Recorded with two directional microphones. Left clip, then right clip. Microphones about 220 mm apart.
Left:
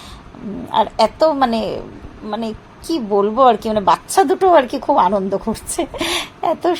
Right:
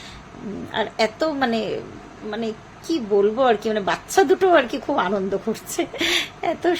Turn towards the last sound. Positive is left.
turn(degrees=15)  # may be behind; listen again after turning